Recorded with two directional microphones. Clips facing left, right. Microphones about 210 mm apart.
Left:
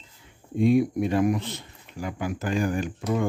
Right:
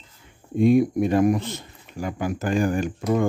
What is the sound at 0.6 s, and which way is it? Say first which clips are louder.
Speech: right 3 dB; 45° right (ahead or behind).